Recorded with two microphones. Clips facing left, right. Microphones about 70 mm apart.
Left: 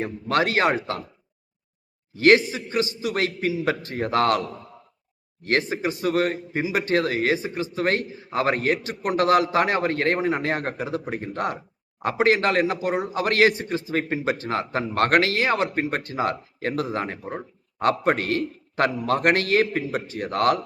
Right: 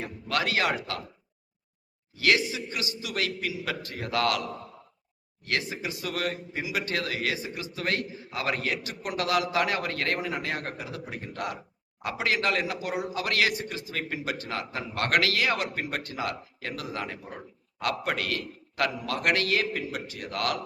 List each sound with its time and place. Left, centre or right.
0.0 s a man's voice: left
2.1 s a man's voice: left
5.5 s a man's voice: left